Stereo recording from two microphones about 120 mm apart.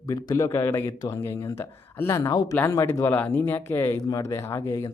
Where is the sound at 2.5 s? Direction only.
20° left (ahead or behind).